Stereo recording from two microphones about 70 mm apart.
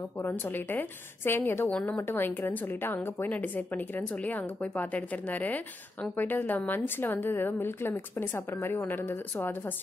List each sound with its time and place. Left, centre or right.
0.2 s a woman's voice: left